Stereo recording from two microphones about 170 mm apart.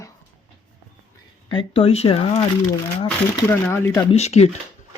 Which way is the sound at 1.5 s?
30° left (ahead or behind).